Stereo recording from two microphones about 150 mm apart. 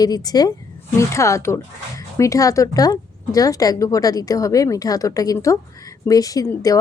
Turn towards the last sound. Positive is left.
turn(degrees=25)  # may be behind; listen again after turning